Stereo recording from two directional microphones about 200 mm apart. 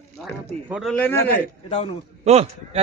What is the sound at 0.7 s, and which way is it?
Speech, centre (ahead or behind).